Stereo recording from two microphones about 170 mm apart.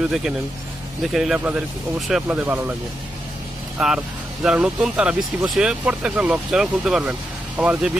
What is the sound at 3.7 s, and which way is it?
Speech, 5° right (ahead or behind).